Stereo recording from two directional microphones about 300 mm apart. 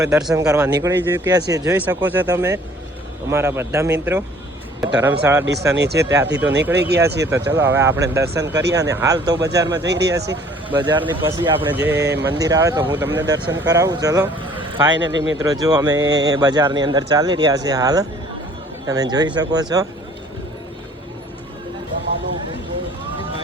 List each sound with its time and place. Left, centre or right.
0.0 s speech: centre
5.7 s speech: right
6.0 s speech: centre
6.7 s speech: right
7.2 s speech: centre
9.8 s speech: right
10.7 s speech: centre
11.9 s speech: right
12.2 s speech: centre